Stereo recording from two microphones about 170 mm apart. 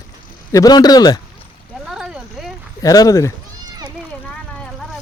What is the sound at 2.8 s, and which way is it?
Speech, 20° left (ahead or behind).